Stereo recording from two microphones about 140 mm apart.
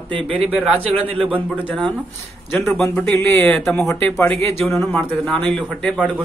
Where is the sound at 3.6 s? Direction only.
5° left (ahead or behind).